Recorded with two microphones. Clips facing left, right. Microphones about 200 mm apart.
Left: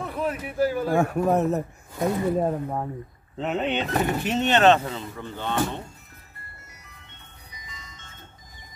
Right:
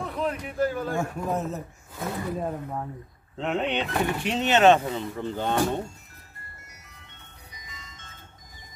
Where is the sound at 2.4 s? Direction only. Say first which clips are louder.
Left 5 dB; 35° left (ahead or behind).